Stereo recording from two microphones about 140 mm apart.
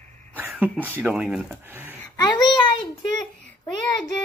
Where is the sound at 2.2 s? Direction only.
30° left (ahead or behind).